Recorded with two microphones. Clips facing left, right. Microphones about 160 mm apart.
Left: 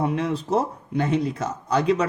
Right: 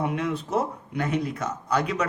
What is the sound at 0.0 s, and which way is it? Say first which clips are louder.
Speech: left 3 dB; 30° left (ahead or behind).